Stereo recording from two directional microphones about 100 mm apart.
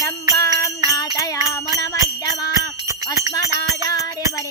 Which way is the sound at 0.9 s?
35° left (ahead or behind).